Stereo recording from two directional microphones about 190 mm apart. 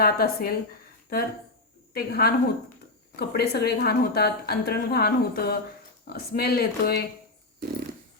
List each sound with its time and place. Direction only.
0.0 s a woman's voice: 55° left (ahead or behind)